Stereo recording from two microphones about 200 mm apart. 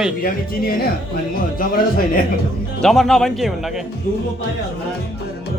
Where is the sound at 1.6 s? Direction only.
45° left (ahead or behind).